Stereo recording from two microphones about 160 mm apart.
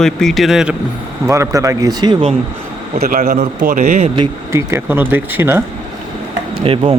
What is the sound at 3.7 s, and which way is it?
Speech, 55° right (ahead or behind).